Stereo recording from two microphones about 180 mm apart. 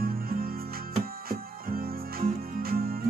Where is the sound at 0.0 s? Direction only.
55° right (ahead or behind).